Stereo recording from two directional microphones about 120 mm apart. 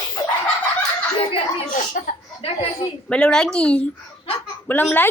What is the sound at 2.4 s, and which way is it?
Speech, 55° left (ahead or behind).